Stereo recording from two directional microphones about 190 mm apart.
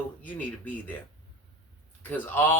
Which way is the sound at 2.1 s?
10° left (ahead or behind).